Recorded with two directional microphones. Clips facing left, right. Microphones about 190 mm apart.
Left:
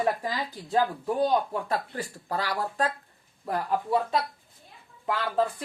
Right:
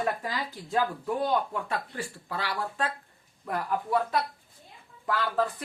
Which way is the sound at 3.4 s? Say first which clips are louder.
Left 2 dB; 30° left (ahead or behind).